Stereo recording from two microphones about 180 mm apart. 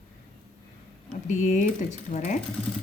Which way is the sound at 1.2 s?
45° left (ahead or behind).